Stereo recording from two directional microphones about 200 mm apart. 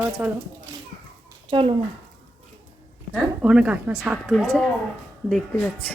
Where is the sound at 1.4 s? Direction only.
25° right (ahead or behind).